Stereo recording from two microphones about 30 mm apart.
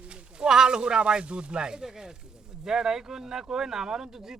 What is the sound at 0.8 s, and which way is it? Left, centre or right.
Speech, right.